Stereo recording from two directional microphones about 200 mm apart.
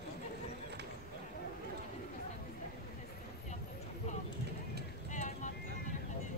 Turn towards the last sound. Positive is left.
turn(degrees=40)  # may be behind; listen again after turning